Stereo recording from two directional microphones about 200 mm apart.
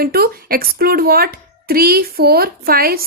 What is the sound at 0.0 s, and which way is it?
Speech, 50° right (ahead or behind).